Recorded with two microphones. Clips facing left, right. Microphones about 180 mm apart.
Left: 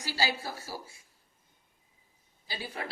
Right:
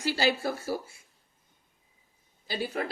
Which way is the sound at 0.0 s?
55° right (ahead or behind).